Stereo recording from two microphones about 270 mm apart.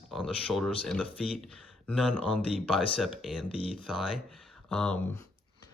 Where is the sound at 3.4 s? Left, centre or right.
Left.